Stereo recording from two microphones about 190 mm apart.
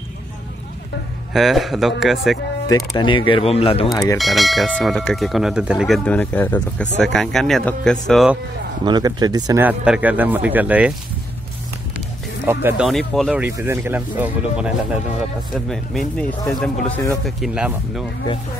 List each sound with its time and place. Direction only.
1.3 s speech: centre (ahead or behind)
2.7 s speech: 25° left (ahead or behind)
3.9 s speech: 15° left (ahead or behind)
4.2 s speech: centre (ahead or behind)
8.8 s speech: 20° right (ahead or behind)
12.4 s speech: 10° right (ahead or behind)
13.6 s speech: 15° right (ahead or behind); by 17.0 s 5° left (ahead or behind)
17.4 s speech: 5° right (ahead or behind)